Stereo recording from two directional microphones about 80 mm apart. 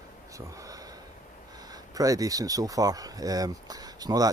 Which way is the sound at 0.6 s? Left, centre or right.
Right.